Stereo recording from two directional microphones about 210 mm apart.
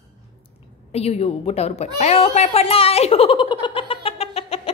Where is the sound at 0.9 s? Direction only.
30° left (ahead or behind).